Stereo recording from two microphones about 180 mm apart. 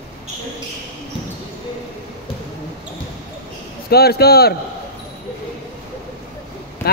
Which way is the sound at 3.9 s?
60° left (ahead or behind).